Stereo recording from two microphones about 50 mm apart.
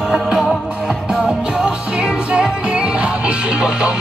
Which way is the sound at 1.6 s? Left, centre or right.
Centre.